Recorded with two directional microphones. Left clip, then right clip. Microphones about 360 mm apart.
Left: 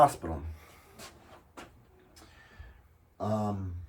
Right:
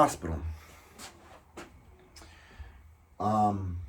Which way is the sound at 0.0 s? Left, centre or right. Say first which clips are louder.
Left 2 dB; centre.